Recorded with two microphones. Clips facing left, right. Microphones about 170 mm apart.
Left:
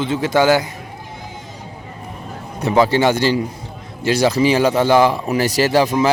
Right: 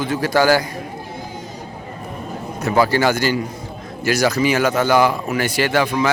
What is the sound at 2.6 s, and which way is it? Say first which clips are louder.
A man's voice: left 2 dB; 25° left (ahead or behind).